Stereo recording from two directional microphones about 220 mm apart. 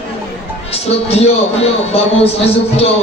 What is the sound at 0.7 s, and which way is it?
Speech, 30° left (ahead or behind).